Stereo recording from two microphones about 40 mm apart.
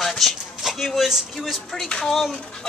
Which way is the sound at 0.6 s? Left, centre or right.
Centre.